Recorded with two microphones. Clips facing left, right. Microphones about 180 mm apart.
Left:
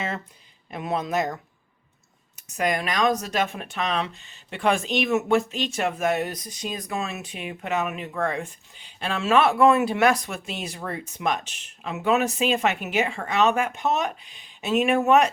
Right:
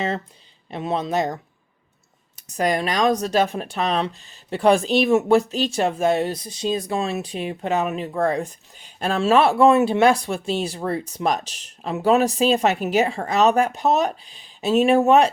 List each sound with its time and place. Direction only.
0.7 s speech: 30° right (ahead or behind)